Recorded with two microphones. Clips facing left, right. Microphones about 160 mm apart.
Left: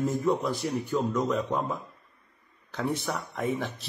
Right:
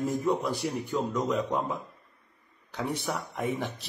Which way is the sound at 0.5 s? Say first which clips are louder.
Left 2 dB; 15° right (ahead or behind).